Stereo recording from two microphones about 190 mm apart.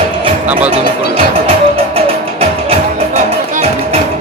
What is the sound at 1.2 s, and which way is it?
Music, 30° right (ahead or behind).